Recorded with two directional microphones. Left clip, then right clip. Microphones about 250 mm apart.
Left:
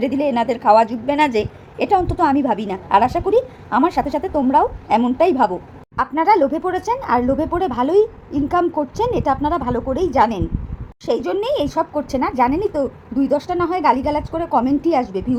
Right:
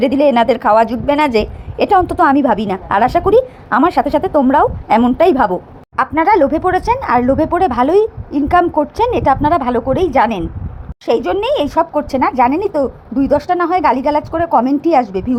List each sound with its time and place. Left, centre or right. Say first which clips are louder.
0.0 s a woman's voice: right 8 dB; centre